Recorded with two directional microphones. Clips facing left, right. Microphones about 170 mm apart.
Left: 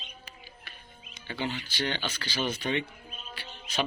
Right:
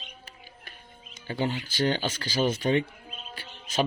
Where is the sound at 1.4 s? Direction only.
40° right (ahead or behind).